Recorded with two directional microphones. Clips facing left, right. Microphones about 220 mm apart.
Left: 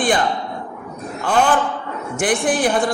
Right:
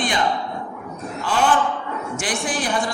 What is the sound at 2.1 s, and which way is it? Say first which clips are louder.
Speech: left 8 dB; 55° left (ahead or behind).